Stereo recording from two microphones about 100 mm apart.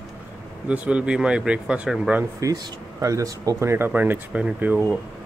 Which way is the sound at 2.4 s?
35° right (ahead or behind).